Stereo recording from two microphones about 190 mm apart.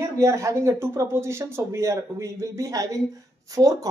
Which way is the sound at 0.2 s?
15° right (ahead or behind).